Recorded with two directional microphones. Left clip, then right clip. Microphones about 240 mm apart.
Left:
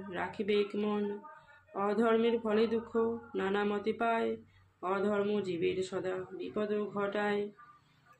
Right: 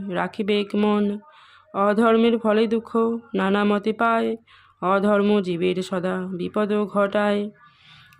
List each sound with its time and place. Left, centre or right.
0.1 s speech: right